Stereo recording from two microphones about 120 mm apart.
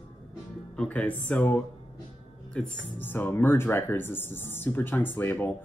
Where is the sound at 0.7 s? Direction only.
10° left (ahead or behind).